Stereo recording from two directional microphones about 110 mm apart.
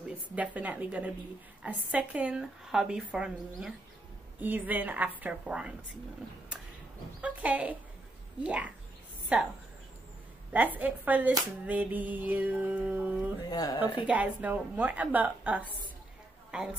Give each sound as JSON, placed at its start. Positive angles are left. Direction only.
{"t": 0.4, "sound": "speech", "side_deg": -15}
{"t": 7.2, "sound": "speech", "side_deg": -10}
{"t": 10.5, "sound": "speech", "side_deg": -15}
{"t": 13.5, "sound": "speech", "side_deg": 35}
{"t": 14.0, "sound": "speech", "side_deg": -15}